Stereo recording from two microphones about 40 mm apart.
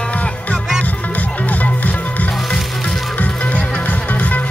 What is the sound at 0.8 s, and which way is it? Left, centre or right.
Music, left.